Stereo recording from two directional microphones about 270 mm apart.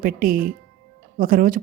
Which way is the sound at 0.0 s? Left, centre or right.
Right.